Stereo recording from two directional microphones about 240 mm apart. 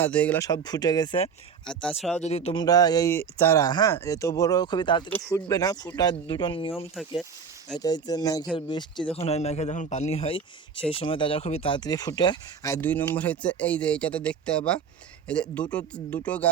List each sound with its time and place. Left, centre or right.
0.0 s speech: centre
1.6 s speech: centre
2.2 s speech: left
7.8 s a man's voice: centre